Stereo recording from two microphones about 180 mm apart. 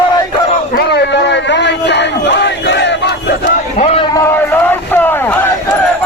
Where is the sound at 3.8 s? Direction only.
35° left (ahead or behind).